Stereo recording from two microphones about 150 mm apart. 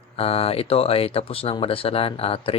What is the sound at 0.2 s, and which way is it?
Speech, 40° left (ahead or behind).